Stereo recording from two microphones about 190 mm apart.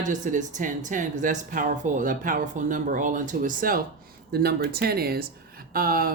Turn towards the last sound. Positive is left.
turn(degrees=-50)  # may be behind; listen again after turning